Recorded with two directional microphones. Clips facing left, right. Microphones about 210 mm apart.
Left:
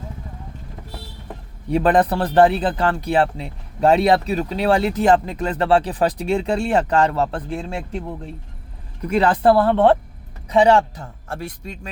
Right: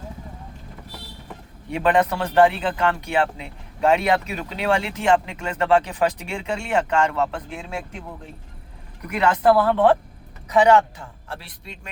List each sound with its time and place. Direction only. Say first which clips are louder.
1.7 s speech: left 3 dB; 35° left (ahead or behind)